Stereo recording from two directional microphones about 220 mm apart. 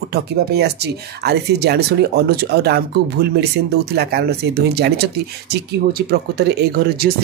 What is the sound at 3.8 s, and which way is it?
Speech, 50° right (ahead or behind).